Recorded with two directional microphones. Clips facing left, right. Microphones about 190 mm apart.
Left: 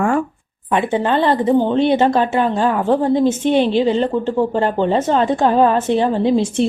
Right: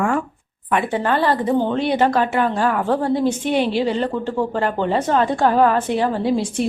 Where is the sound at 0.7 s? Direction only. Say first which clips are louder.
Left 3 dB; 20° left (ahead or behind).